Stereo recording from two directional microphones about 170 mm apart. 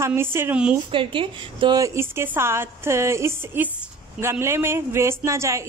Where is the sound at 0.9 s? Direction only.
30° right (ahead or behind).